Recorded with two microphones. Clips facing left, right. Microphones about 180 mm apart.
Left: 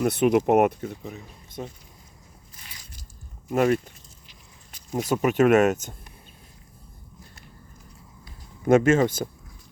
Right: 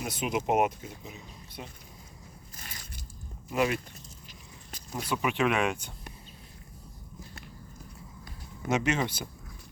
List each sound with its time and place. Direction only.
0.0 s speech: 65° left (ahead or behind)
2.6 s biting: 45° right (ahead or behind)
3.5 s speech: 45° left (ahead or behind)
4.3 s a sound: 40° right (ahead or behind)
4.9 s speech: 45° left (ahead or behind)
8.6 s speech: 50° left (ahead or behind)